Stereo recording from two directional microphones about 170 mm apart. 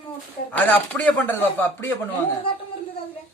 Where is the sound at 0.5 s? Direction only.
10° left (ahead or behind).